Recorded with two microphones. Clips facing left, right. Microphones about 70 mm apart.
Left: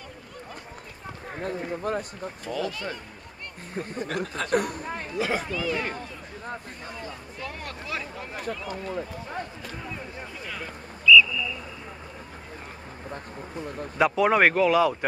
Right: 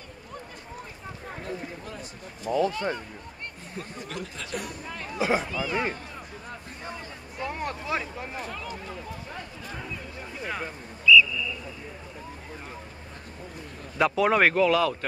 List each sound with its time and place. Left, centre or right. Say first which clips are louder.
1.4 s speech: left 8 dB; left
2.5 s speech: right 6 dB; right
3.7 s speech: left 7 dB; left
5.2 s speech: right 2 dB; centre
7.3 s speech: right 8 dB; right
10.4 s a sound: right 7 dB; right
13.9 s speech: left 1 dB; centre